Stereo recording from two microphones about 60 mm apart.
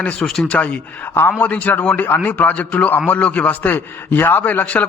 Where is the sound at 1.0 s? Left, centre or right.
Left.